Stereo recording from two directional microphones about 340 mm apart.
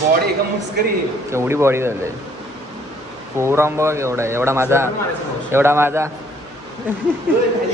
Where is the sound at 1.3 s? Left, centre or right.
Centre.